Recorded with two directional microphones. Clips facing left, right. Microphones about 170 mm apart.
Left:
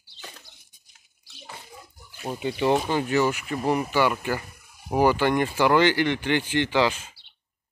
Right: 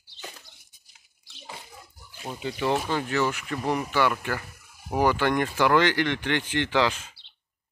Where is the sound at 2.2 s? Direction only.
20° left (ahead or behind).